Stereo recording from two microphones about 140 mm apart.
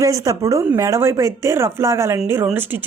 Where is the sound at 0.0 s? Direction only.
25° right (ahead or behind).